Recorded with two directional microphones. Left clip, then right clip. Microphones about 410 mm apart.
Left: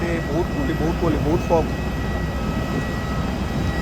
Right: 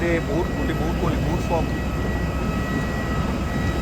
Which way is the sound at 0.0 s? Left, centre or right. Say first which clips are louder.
Right 1 dB; centre.